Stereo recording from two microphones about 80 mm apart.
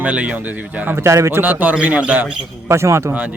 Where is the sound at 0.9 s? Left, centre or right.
Right.